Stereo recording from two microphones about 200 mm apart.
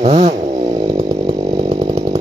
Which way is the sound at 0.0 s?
30° right (ahead or behind).